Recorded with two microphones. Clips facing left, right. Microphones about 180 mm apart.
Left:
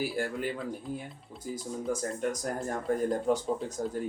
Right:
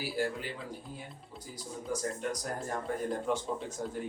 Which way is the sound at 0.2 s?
50° left (ahead or behind).